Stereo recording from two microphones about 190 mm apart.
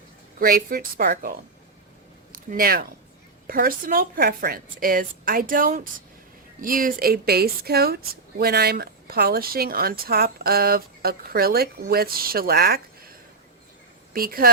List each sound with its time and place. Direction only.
0.3 s speech: 50° right (ahead or behind)